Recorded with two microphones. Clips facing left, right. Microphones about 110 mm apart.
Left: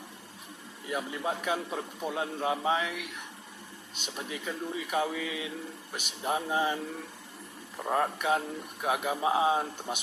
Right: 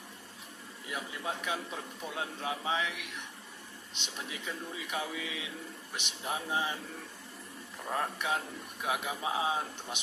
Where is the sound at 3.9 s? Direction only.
45° left (ahead or behind).